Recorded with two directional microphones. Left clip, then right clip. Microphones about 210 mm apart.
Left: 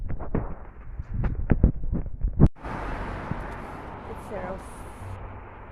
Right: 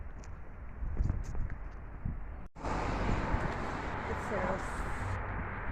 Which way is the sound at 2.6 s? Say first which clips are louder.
Left 2 dB; 40° left (ahead or behind).